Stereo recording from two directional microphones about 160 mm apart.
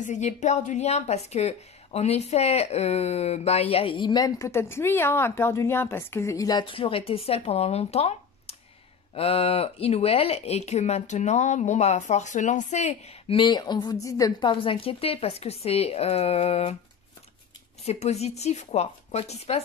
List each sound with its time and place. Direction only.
0.0 s a woman's voice: 50° left (ahead or behind)
17.8 s a woman's voice: 45° left (ahead or behind)